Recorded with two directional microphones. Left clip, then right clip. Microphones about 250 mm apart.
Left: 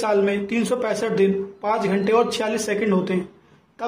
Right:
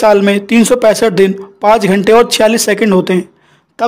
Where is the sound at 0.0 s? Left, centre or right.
Right.